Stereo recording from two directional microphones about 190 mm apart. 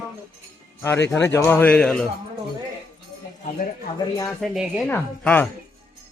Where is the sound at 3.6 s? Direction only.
50° left (ahead or behind).